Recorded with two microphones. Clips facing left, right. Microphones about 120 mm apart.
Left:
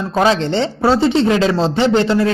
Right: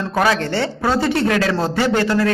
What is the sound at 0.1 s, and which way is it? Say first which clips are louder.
Speech: left 4 dB; 20° left (ahead or behind).